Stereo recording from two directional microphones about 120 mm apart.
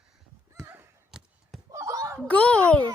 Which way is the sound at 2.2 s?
10° left (ahead or behind).